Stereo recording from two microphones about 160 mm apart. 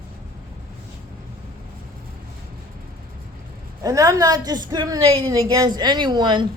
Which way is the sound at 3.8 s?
20° right (ahead or behind).